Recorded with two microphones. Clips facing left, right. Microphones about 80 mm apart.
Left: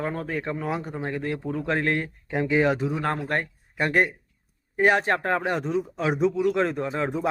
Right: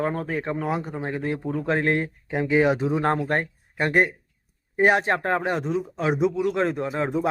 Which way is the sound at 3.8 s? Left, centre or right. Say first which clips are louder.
Right 1 dB; centre.